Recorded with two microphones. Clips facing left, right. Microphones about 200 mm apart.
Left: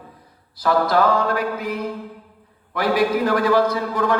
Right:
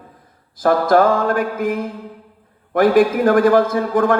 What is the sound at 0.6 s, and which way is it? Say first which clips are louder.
A man's voice: right 4 dB; 50° right (ahead or behind).